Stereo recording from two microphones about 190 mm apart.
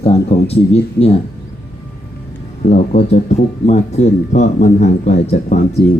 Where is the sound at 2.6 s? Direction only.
35° left (ahead or behind).